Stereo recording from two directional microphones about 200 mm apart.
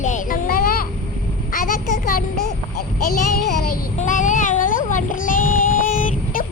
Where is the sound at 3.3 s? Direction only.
50° left (ahead or behind).